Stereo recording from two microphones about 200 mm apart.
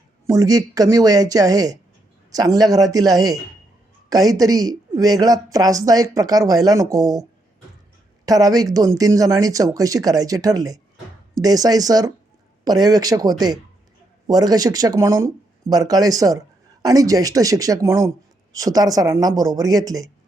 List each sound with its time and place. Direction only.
0.3 s a man's voice: 15° right (ahead or behind)